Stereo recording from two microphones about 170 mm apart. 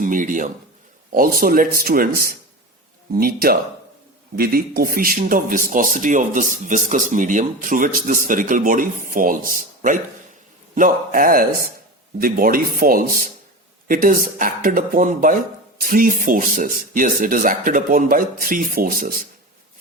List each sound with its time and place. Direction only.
0.0 s a man's voice: 50° right (ahead or behind)